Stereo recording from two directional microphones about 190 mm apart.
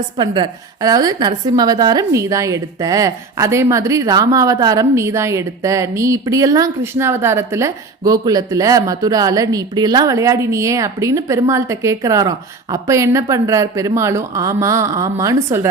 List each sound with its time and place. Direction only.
0.2 s a woman's voice: 25° right (ahead or behind)